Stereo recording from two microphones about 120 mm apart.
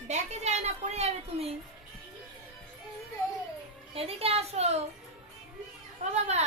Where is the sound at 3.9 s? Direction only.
55° right (ahead or behind).